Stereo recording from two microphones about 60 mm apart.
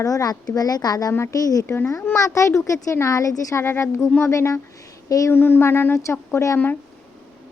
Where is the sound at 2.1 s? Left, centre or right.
Left.